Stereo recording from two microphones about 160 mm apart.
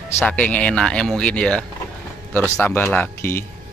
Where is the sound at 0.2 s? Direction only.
5° left (ahead or behind).